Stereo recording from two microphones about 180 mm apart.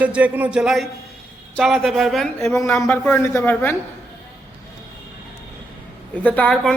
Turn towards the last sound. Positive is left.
turn(degrees=5)  # may be behind; listen again after turning